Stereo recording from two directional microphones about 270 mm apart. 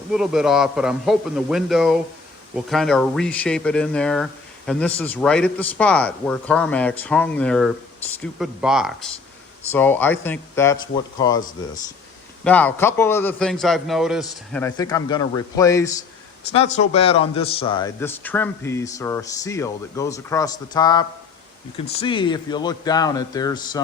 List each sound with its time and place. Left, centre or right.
0.1 s a man's voice: centre
14.6 s a man's voice: centre
16.5 s a man's voice: left